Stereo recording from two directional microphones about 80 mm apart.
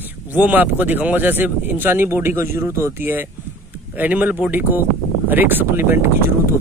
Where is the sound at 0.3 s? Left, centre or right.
Centre.